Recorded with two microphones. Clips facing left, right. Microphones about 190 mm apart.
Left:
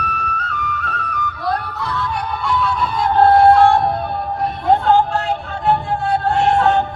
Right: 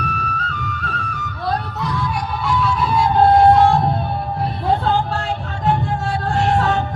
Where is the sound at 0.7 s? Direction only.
30° right (ahead or behind).